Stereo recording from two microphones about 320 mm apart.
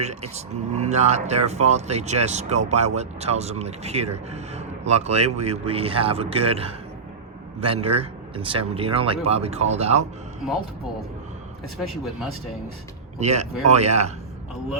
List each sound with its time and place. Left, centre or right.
0.0 s speech: centre
13.1 s speech: right